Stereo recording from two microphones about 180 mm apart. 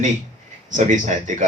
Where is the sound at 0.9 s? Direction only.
45° right (ahead or behind).